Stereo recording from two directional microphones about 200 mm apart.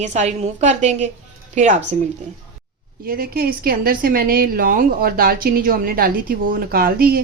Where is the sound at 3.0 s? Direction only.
50° right (ahead or behind).